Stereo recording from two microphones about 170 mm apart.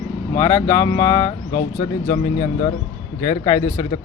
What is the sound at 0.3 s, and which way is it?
Speech, 20° left (ahead or behind).